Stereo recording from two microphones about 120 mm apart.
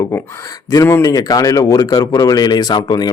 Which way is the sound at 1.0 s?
30° left (ahead or behind).